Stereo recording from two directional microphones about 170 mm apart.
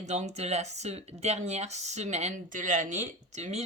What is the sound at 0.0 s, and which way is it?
A woman's voice, 40° right (ahead or behind).